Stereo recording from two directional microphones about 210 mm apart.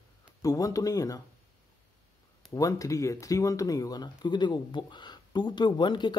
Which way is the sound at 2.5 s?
15° left (ahead or behind).